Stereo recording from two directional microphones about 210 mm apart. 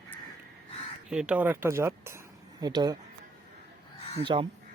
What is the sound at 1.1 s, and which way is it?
Speech, 5° right (ahead or behind).